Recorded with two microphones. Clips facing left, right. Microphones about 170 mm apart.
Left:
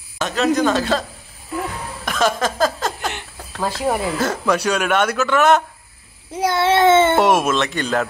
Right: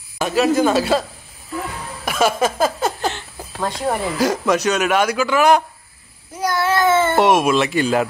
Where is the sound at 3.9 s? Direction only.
5° left (ahead or behind).